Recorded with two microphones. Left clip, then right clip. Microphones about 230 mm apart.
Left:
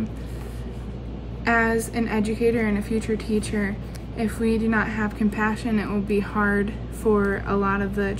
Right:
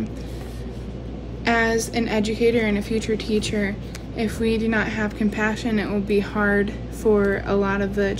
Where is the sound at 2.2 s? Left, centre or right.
Right.